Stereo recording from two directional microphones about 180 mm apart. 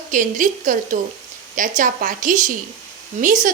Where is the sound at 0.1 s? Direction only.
45° right (ahead or behind).